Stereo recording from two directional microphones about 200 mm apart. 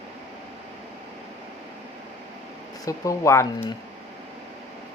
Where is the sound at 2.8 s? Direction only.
15° left (ahead or behind).